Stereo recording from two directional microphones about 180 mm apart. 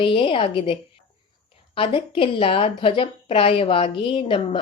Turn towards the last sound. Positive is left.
turn(degrees=30)  # may be behind; listen again after turning